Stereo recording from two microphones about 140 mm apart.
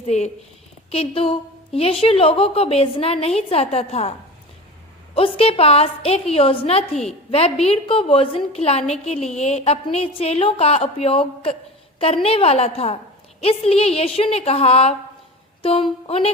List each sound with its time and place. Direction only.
0.1 s a woman's voice: 50° left (ahead or behind)
5.1 s a woman's voice: 40° left (ahead or behind)